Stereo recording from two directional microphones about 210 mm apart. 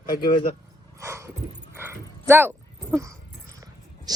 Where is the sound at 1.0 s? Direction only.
15° right (ahead or behind).